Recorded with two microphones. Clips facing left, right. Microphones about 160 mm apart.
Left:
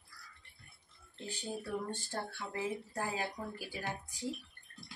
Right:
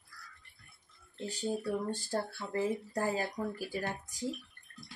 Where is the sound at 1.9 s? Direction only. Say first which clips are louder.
Right 6 dB; 40° right (ahead or behind).